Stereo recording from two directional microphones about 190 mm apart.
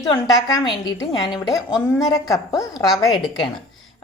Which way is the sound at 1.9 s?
20° left (ahead or behind).